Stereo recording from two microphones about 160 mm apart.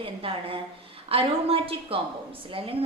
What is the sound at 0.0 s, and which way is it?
A woman's voice, 35° right (ahead or behind).